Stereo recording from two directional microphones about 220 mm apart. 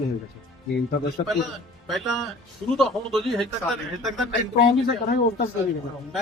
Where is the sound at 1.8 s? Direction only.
Centre (ahead or behind).